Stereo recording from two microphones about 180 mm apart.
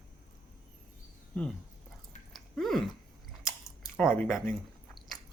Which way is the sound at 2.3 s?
Centre (ahead or behind).